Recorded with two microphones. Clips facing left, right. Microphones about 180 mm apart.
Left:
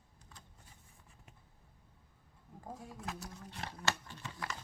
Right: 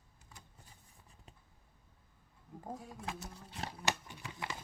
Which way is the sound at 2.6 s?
Centre (ahead or behind).